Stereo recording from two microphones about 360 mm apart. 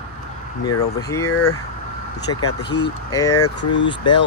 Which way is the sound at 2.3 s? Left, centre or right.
Left.